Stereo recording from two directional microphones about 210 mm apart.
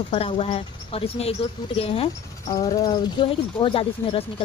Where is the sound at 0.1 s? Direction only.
30° left (ahead or behind).